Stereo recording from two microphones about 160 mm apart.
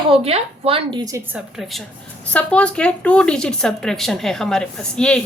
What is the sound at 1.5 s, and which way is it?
Speech, centre (ahead or behind).